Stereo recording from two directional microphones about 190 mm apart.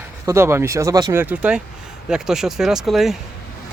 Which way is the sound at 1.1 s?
10° right (ahead or behind).